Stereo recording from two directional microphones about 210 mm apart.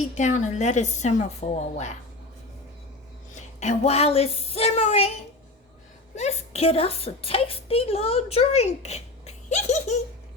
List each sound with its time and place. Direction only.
0.2 s a woman's voice: 35° left (ahead or behind)
3.6 s a woman's voice: 30° left (ahead or behind)
6.1 s a woman's voice: 30° left (ahead or behind)